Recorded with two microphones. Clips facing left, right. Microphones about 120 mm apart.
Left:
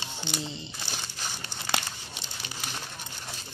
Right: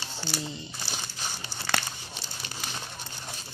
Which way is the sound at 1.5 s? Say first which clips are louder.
Right 1 dB; 15° left (ahead or behind).